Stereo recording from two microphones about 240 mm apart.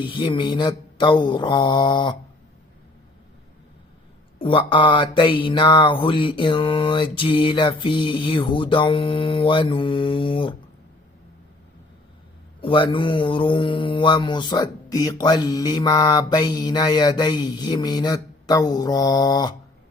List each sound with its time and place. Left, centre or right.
0.0 s mantra: centre
4.4 s mantra: left
12.6 s speech: left